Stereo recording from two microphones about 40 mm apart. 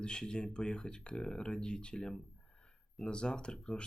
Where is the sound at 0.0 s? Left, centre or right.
Left.